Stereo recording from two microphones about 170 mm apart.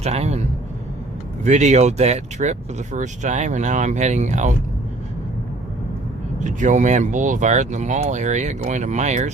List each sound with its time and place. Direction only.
0.0 s a man's voice: 40° right (ahead or behind)
1.5 s speech: 45° right (ahead or behind)
6.4 s speech: 45° right (ahead or behind)